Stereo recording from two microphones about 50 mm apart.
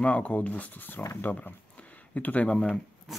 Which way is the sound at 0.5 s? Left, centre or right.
Left.